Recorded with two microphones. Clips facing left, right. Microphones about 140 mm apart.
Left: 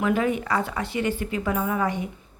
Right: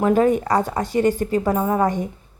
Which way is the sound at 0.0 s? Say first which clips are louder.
Right 6 dB; 40° right (ahead or behind).